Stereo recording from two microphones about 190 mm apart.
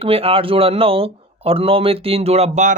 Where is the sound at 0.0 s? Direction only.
30° right (ahead or behind).